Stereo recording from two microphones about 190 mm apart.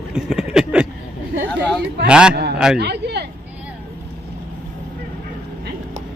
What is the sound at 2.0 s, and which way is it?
Speech, 5° right (ahead or behind).